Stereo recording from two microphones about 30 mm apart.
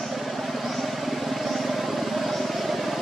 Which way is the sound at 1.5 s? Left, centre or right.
Centre.